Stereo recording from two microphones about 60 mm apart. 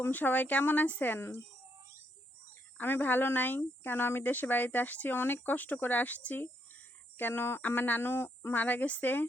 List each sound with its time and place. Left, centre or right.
0.0 s speech: left
2.7 s speech: left